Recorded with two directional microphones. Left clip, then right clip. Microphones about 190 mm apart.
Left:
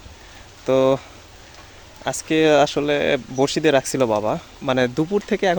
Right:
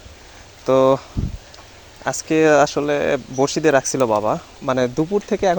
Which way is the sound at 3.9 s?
5° left (ahead or behind).